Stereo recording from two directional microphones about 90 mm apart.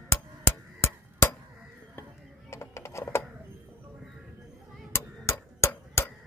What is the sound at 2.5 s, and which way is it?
Typing, 30° left (ahead or behind).